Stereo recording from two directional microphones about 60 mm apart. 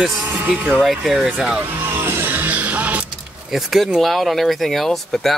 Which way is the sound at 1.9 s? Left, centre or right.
Right.